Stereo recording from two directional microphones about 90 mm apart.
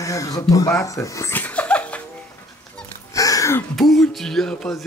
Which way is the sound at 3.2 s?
40° left (ahead or behind).